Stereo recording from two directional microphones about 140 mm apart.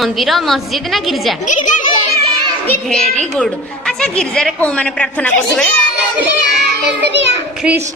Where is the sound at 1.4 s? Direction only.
65° left (ahead or behind).